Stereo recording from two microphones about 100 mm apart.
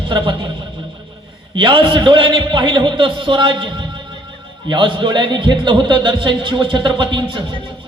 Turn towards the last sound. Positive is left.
turn(degrees=-55)  # may be behind; listen again after turning